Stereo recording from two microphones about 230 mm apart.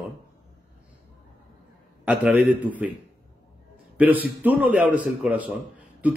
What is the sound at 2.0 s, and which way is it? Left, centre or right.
Speech, centre.